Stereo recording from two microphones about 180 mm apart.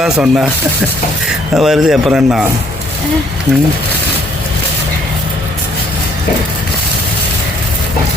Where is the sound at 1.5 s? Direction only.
Centre (ahead or behind).